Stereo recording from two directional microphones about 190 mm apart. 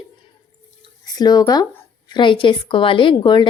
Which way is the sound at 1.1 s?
20° left (ahead or behind).